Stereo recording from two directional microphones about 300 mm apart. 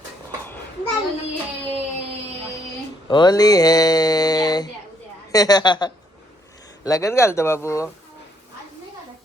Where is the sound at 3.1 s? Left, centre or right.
Centre.